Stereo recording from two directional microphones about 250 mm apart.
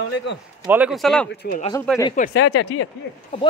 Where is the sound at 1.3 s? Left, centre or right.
Left.